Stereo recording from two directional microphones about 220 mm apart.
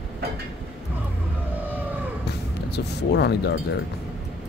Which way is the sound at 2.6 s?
50° left (ahead or behind).